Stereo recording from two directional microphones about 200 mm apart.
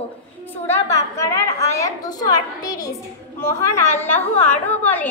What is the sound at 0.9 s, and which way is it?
A woman's voice, 15° left (ahead or behind).